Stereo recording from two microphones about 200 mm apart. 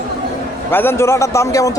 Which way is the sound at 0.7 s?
10° left (ahead or behind).